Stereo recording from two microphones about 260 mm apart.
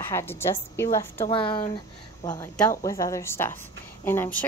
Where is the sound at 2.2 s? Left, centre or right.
Centre.